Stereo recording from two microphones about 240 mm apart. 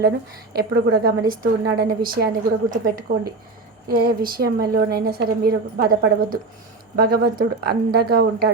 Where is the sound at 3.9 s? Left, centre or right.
Right.